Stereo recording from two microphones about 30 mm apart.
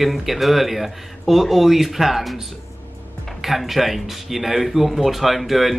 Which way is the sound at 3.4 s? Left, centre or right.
Centre.